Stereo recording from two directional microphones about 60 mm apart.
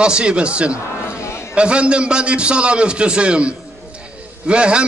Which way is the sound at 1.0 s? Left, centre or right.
Left.